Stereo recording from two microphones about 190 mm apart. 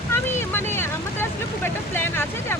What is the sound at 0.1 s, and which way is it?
Vehicle, 10° left (ahead or behind).